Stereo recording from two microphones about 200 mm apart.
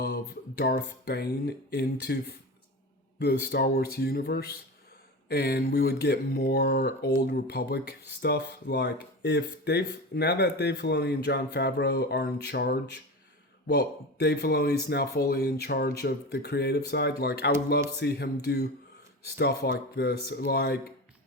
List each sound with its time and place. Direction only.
0.0 s speech: 55° left (ahead or behind)
3.2 s speech: 55° left (ahead or behind)